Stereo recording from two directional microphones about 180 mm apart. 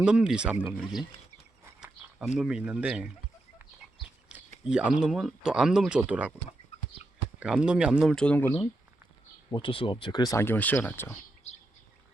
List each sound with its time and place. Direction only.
0.0 s speech: 5° right (ahead or behind)
4.7 s speech: 5° right (ahead or behind)
6.7 s chicken: 35° left (ahead or behind)
7.3 s speech: 5° right (ahead or behind)
9.5 s speech: 30° left (ahead or behind); by 11.1 s 10° left (ahead or behind)
11.5 s bird: 40° left (ahead or behind)